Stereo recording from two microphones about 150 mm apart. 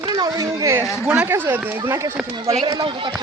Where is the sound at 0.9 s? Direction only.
5° right (ahead or behind); by 3.1 s 30° right (ahead or behind).